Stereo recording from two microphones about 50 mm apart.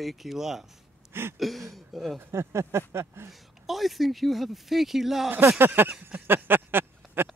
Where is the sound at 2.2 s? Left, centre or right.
Right.